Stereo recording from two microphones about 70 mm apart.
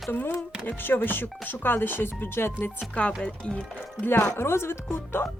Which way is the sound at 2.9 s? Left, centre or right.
Centre.